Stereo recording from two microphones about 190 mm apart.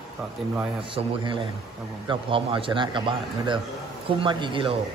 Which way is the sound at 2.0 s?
25° right (ahead or behind).